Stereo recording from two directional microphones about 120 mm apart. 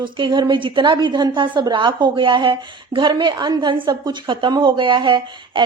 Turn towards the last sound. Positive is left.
turn(degrees=-40)  # may be behind; listen again after turning